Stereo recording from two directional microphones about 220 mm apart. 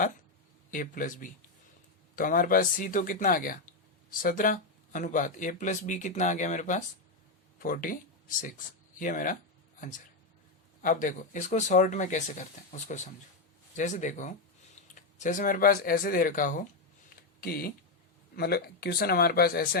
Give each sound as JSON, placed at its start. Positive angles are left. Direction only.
{"t": 0.7, "sound": "speech", "side_deg": 40}
{"t": 10.8, "sound": "speech", "side_deg": 35}